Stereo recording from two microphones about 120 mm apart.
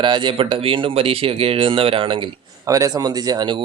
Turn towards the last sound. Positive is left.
turn(degrees=-40)  # may be behind; listen again after turning